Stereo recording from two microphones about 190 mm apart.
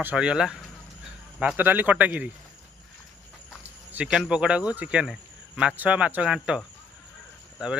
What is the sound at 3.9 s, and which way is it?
Speech, 5° right (ahead or behind).